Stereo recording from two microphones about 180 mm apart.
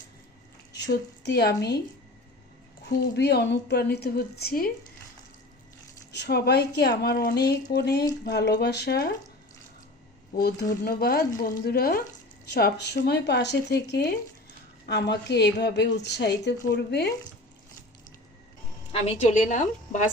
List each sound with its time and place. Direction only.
0.7 s speech: 70° left (ahead or behind)
2.9 s a woman's voice: 65° left (ahead or behind)
6.1 s a woman's voice: 65° left (ahead or behind)
10.3 s a woman's voice: 55° left (ahead or behind)
18.9 s a woman's voice: 35° left (ahead or behind)